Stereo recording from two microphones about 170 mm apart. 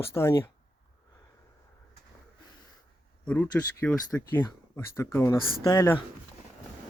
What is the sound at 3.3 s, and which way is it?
Speech, 10° left (ahead or behind).